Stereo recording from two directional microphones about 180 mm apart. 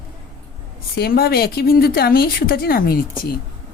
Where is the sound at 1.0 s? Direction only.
60° left (ahead or behind).